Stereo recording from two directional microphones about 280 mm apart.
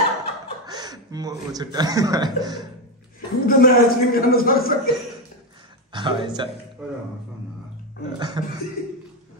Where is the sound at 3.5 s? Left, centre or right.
Left.